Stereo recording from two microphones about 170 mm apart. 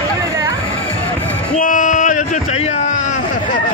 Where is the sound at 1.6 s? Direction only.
50° left (ahead or behind).